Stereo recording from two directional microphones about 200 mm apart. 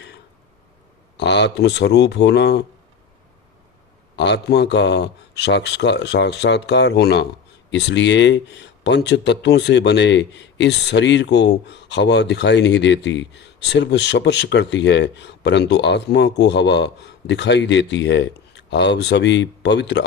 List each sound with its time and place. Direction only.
1.1 s speech: 60° left (ahead or behind)
4.2 s speech: 60° left (ahead or behind)